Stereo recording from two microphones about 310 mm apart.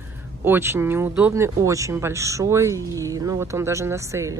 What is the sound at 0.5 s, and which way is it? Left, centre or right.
Speech, centre.